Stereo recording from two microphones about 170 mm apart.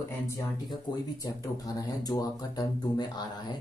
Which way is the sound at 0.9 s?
25° left (ahead or behind).